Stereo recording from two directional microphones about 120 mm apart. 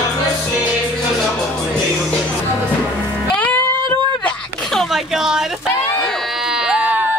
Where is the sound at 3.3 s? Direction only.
10° left (ahead or behind).